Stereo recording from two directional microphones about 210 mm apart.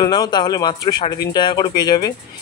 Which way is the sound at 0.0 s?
20° left (ahead or behind).